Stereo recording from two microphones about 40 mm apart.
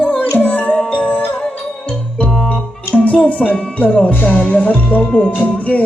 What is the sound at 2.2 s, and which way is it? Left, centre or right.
Music, centre.